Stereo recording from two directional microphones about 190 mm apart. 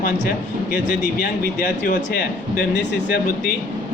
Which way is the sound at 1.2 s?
45° left (ahead or behind).